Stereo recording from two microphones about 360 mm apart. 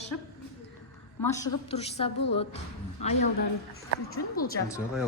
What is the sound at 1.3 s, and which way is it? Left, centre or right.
A woman's voice, centre.